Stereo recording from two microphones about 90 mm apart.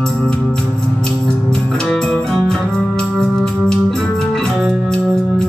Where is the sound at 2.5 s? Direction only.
5° left (ahead or behind).